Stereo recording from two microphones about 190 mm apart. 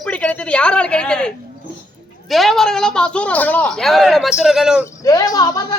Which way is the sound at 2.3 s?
Centre (ahead or behind).